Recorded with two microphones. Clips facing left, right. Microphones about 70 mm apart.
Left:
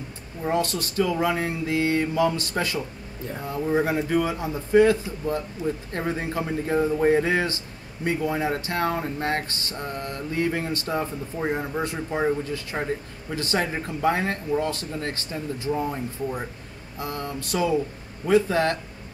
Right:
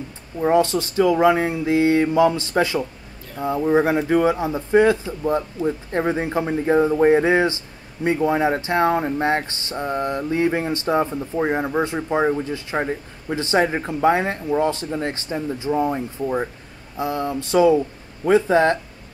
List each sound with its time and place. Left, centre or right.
0.4 s speech: right